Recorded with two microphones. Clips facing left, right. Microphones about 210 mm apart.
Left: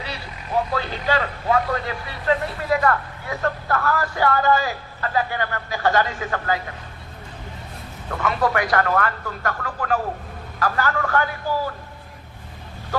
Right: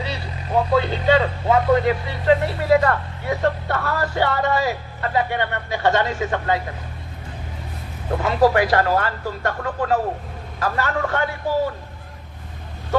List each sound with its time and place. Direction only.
0.8 s speech: 25° right (ahead or behind)
8.1 s speech: 30° right (ahead or behind)